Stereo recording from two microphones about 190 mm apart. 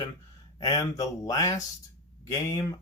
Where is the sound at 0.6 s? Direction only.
15° left (ahead or behind).